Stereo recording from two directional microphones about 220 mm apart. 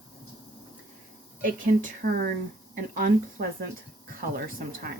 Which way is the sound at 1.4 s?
35° right (ahead or behind).